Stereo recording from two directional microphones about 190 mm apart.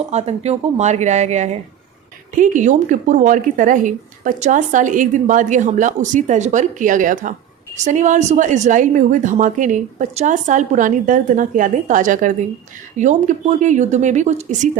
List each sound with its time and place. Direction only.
0.1 s a woman's voice: 35° right (ahead or behind)